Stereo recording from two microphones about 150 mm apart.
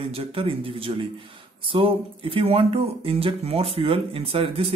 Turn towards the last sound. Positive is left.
turn(degrees=-40)  # may be behind; listen again after turning